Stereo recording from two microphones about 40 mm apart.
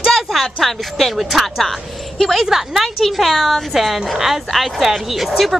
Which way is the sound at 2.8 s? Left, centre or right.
Centre.